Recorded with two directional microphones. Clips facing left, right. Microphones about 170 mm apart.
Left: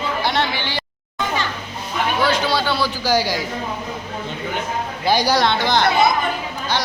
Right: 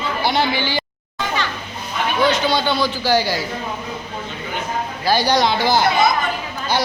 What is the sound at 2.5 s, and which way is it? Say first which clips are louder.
Speech: right 1 dB; 5° left (ahead or behind).